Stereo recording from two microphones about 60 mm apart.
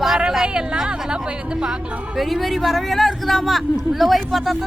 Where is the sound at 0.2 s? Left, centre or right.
Centre.